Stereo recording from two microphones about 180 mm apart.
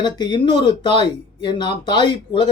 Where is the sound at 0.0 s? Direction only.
25° left (ahead or behind).